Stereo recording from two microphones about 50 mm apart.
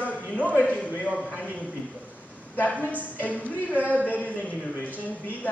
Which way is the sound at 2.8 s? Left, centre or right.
Left.